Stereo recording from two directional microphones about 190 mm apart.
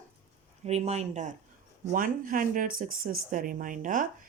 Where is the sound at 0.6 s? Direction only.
35° right (ahead or behind).